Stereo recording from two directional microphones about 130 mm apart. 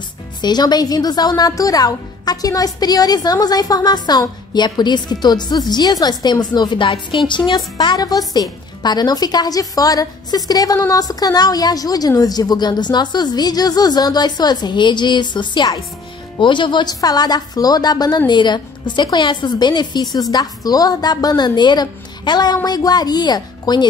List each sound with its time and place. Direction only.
0.4 s a woman's voice: 35° left (ahead or behind)